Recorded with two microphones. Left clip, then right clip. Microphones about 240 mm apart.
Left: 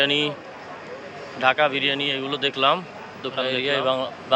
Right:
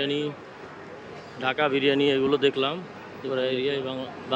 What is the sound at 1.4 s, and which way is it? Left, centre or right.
Speech, centre.